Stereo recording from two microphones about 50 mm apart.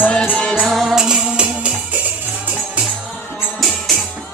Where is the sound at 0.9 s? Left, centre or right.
Centre.